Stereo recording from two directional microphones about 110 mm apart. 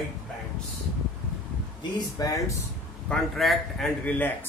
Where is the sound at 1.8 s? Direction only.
35° left (ahead or behind).